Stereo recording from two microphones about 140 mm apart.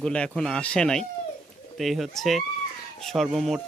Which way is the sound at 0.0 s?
5° left (ahead or behind).